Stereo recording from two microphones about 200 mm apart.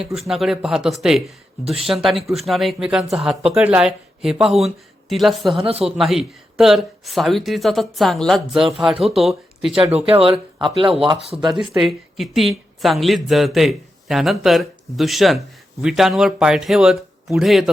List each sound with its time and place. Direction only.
0.3 s speech: centre (ahead or behind)
5.5 s speech: 30° right (ahead or behind)
5.8 s speech: centre (ahead or behind)
9.9 s speech: 30° right (ahead or behind)
11.8 s speech: centre (ahead or behind)